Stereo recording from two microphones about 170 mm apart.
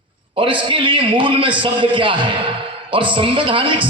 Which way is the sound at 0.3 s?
30° right (ahead or behind).